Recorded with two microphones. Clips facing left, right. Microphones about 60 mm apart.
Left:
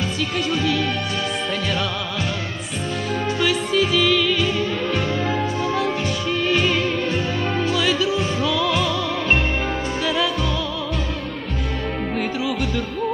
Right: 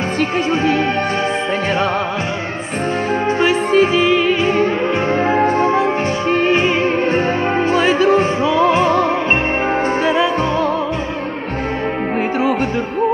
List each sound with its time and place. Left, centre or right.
0.2 s music: right
3.3 s music: right
10.0 s music: right